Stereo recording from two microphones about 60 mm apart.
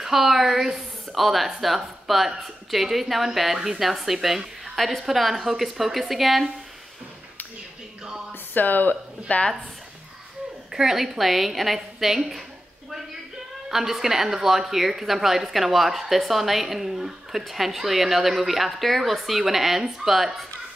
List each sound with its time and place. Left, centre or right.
0.0 s speech: centre
8.5 s speech: left
10.7 s speech: centre
13.7 s speech: centre